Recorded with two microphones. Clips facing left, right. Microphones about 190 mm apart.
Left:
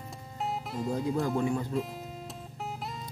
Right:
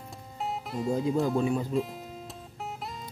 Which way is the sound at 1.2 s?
15° right (ahead or behind).